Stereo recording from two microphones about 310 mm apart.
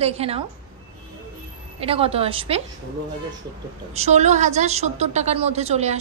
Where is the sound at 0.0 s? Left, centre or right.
Centre.